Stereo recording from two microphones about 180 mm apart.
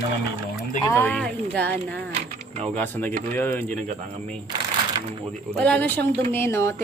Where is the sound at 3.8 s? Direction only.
35° right (ahead or behind).